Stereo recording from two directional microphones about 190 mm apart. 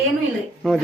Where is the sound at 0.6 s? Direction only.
5° left (ahead or behind).